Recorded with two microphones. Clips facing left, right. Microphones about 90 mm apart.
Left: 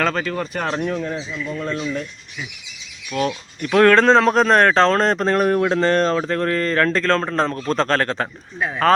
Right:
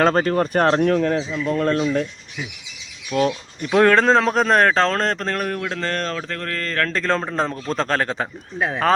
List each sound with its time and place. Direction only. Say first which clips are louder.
0.0 s speech: right 5 dB; 40° right (ahead or behind)
3.1 s speech: right 2 dB; 25° right (ahead or behind)
3.7 s a man's voice: left 2 dB; 10° right (ahead or behind)
5.1 s speech: left 7 dB; 20° left (ahead or behind)
7.0 s a man's voice: left 2 dB; 10° right (ahead or behind)
8.5 s speech: right 2 dB; 25° right (ahead or behind)